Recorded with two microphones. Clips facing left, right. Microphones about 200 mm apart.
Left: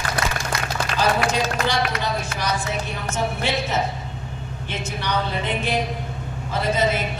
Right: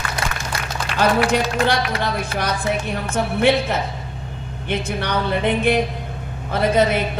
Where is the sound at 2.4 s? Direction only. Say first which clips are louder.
Right 3 dB; 55° right (ahead or behind).